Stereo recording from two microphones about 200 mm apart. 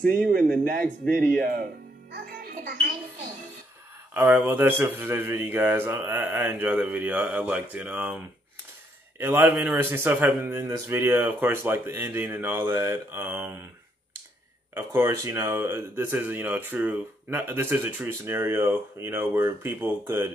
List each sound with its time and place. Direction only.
0.7 s a child's voice: 45° right (ahead or behind)
4.1 s speech: 10° right (ahead or behind)
9.2 s speech: 10° right (ahead or behind)
14.7 s speech: 10° right (ahead or behind)